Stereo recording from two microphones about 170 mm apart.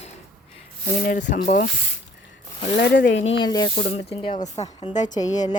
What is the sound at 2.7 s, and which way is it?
Speech, 90° left.